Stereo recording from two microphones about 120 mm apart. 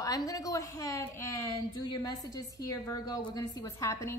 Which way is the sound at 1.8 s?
35° left (ahead or behind).